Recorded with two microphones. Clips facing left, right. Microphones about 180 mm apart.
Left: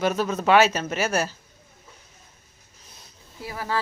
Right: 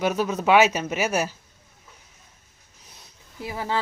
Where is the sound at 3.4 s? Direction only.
20° right (ahead or behind).